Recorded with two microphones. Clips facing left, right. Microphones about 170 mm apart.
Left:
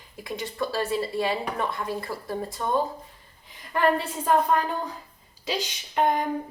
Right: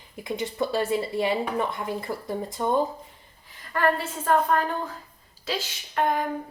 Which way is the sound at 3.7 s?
15° left (ahead or behind).